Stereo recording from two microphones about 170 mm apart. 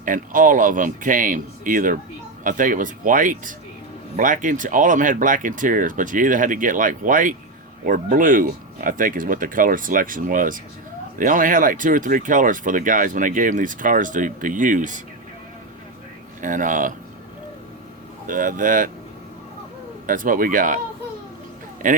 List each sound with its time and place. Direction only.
0.0 s speech: 50° right (ahead or behind)
16.4 s speech: 50° right (ahead or behind)
18.3 s speech: 50° right (ahead or behind)
20.1 s speech: 50° right (ahead or behind)
21.8 s speech: 50° right (ahead or behind)